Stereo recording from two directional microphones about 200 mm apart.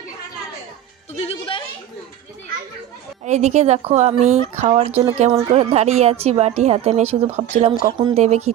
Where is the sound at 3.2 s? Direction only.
35° right (ahead or behind).